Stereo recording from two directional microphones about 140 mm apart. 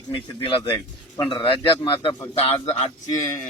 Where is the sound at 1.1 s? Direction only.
30° left (ahead or behind).